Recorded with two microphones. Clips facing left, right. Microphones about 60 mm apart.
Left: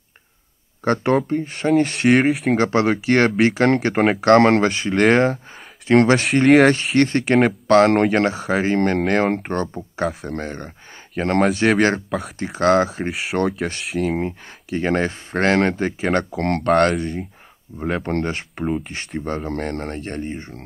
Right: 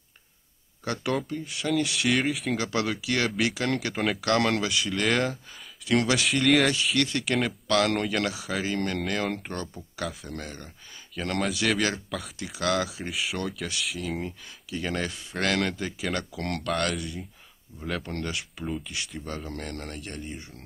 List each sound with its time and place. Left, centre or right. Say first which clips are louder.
0.8 s speech: left 10 dB; left
2.1 s speech: left 10 dB; left
2.5 s speech: left 10 dB; left
3.9 s speech: left 10 dB; left
4.3 s speech: left 12 dB; left
11.2 s speech: left 10 dB; left
13.1 s speech: left 9 dB; left
14.1 s speech: left 9 dB; left